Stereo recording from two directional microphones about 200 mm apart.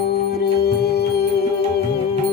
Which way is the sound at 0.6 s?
55° left (ahead or behind).